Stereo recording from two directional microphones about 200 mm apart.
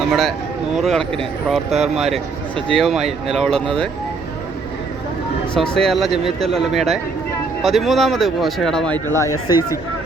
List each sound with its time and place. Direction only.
0.1 s speech: centre (ahead or behind)
2.0 s speech: 30° right (ahead or behind)
2.7 s speech: centre (ahead or behind)
5.5 s speech: 5° left (ahead or behind)